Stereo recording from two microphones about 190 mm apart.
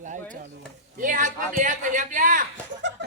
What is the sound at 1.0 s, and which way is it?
A man's voice, 45° right (ahead or behind).